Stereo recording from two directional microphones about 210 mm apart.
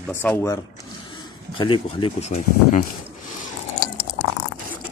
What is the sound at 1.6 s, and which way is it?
Speech, 25° left (ahead or behind).